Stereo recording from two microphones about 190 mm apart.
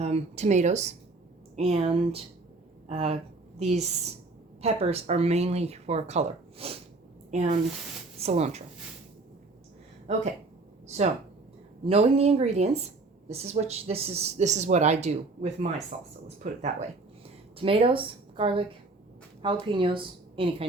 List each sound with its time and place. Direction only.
0.0 s speech: 35° right (ahead or behind)
11.9 s a woman's voice: 30° right (ahead or behind)